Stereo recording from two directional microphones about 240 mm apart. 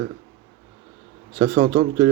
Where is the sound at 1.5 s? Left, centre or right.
Right.